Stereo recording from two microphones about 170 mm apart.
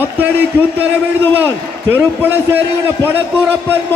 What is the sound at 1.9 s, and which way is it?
A man's voice, 10° right (ahead or behind).